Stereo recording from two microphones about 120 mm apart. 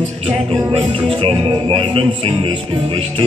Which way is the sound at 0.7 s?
50° right (ahead or behind).